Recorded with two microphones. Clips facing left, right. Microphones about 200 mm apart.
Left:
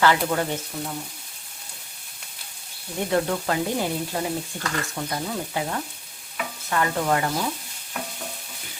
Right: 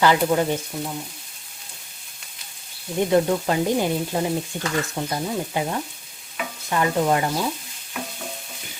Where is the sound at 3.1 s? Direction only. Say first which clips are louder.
Right 3 dB; 20° right (ahead or behind).